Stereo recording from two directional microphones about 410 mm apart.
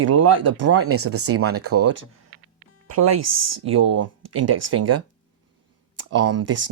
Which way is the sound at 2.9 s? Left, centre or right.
Right.